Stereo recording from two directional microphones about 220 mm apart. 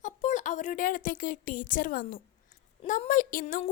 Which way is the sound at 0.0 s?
35° left (ahead or behind).